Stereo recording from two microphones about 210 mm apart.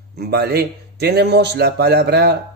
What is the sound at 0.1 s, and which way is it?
Speech, 50° right (ahead or behind).